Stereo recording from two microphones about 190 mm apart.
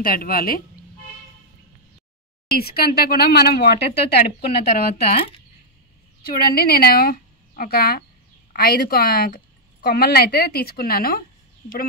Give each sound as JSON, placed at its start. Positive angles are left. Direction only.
{"t": 0.0, "sound": "a woman's voice", "side_deg": 50}
{"t": 2.5, "sound": "speech", "side_deg": 55}
{"t": 6.2, "sound": "a woman's voice", "side_deg": 50}